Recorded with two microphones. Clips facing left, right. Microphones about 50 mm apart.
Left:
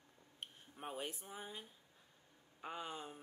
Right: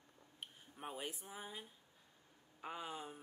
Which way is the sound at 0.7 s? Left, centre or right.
Centre.